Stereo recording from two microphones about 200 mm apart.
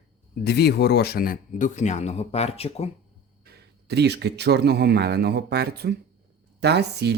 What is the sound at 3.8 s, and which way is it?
Speech, 55° right (ahead or behind).